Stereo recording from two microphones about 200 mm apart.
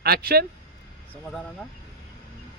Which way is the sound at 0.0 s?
50° right (ahead or behind).